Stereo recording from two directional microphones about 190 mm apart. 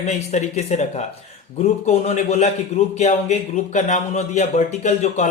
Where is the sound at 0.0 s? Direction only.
35° left (ahead or behind).